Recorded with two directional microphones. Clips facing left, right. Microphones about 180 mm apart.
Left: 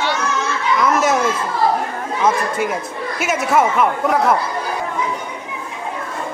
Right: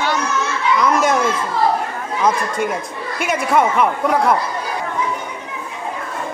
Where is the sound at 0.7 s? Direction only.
5° left (ahead or behind).